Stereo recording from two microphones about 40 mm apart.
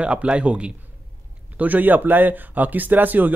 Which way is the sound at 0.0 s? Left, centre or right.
Right.